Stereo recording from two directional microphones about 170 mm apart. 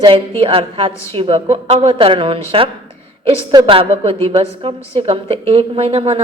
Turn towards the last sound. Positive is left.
turn(degrees=-35)  # may be behind; listen again after turning